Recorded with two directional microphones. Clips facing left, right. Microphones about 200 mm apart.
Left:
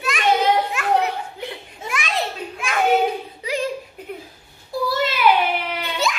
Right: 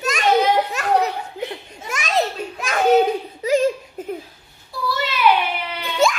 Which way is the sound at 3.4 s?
45° right (ahead or behind).